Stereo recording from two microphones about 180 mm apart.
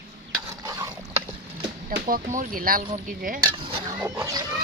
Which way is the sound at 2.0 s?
50° right (ahead or behind).